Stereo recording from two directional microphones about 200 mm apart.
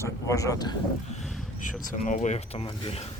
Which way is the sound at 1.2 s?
Centre (ahead or behind).